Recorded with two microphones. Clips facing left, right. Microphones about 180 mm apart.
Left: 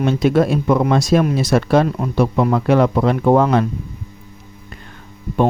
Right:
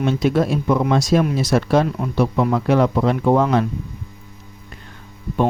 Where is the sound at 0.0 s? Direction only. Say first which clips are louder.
Left 3 dB; 55° left (ahead or behind).